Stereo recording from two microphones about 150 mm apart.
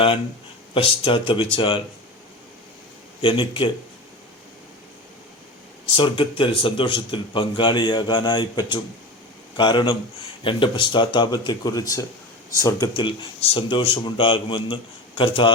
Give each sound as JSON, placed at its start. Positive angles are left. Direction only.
{"t": 0.7, "sound": "speech", "side_deg": 35}
{"t": 3.2, "sound": "speech", "side_deg": 35}
{"t": 6.0, "sound": "speech", "side_deg": 35}